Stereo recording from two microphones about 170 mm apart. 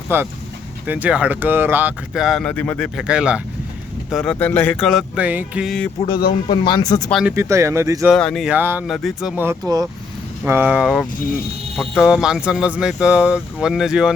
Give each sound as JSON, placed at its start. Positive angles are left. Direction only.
{"t": 0.1, "sound": "speech", "side_deg": -15}
{"t": 6.1, "sound": "speech", "side_deg": 25}
{"t": 7.1, "sound": "speech", "side_deg": 0}
{"t": 7.3, "sound": "speech", "side_deg": -15}
{"t": 8.1, "sound": "speech", "side_deg": 0}
{"t": 8.5, "sound": "speech", "side_deg": -10}
{"t": 8.9, "sound": "speech", "side_deg": 0}
{"t": 9.4, "sound": "speech", "side_deg": -20}